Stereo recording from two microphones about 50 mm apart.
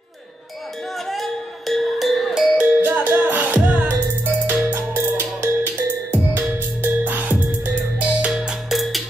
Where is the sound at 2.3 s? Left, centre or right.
Right.